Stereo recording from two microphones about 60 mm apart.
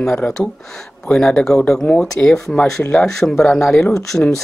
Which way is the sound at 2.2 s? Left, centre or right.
Left.